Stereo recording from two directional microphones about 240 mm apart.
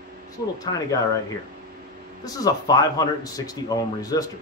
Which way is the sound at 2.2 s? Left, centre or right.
Centre.